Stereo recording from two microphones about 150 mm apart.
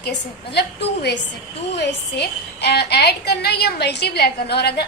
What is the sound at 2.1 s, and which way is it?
A woman's voice, 90° left.